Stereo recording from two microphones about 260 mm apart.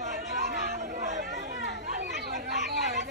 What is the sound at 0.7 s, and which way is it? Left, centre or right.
Chatter, right.